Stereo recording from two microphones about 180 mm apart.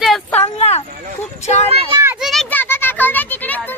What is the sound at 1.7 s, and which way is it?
Speech, 30° right (ahead or behind).